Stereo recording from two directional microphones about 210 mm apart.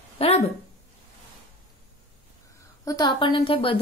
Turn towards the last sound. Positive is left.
turn(degrees=25)  # may be behind; listen again after turning